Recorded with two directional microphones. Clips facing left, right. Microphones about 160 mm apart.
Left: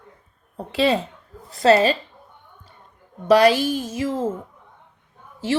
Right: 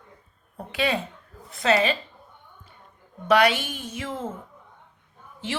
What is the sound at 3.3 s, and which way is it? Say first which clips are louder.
Speech: left 6 dB; 35° left (ahead or behind).